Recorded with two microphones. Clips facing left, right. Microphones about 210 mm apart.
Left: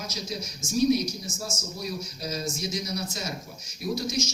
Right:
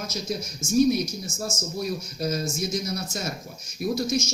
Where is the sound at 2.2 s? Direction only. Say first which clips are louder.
Right 7 dB; 50° right (ahead or behind).